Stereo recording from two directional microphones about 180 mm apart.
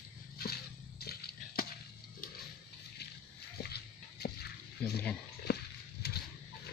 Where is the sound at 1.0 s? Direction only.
60° left (ahead or behind).